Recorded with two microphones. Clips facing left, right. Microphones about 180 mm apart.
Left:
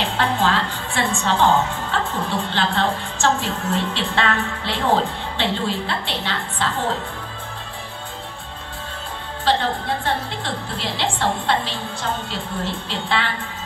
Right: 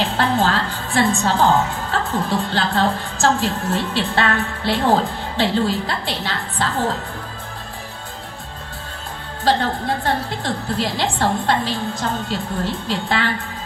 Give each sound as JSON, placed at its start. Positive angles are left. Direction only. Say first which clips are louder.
{"t": 0.0, "sound": "a woman's voice", "louder": "right 2 dB", "side_deg": -40}
{"t": 9.4, "sound": "a woman's voice", "louder": "right 2 dB", "side_deg": -40}